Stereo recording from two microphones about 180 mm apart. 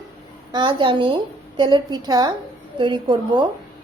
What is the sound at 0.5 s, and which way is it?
A woman's voice, 25° right (ahead or behind).